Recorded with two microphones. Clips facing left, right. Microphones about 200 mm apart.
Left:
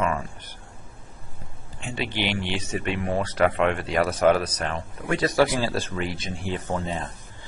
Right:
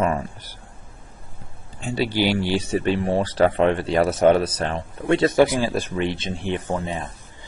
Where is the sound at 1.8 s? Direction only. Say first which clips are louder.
Right 7 dB; 35° right (ahead or behind).